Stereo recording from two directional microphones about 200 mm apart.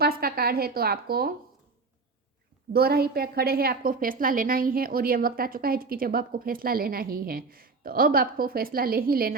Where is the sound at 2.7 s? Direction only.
50° right (ahead or behind).